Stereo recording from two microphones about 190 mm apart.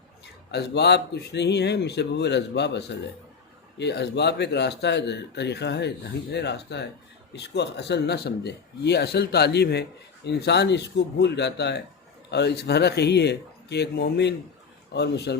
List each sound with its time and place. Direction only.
0.5 s speech: 60° left (ahead or behind)